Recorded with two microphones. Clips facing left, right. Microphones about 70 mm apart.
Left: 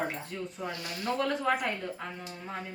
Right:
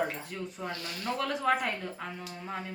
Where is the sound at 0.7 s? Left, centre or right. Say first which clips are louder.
Left 3 dB; centre.